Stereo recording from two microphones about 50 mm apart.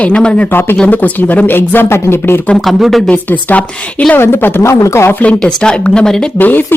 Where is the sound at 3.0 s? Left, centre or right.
Left.